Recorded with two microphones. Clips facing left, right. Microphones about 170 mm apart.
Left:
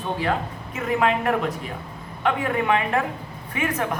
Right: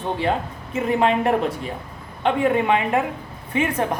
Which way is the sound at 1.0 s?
30° right (ahead or behind).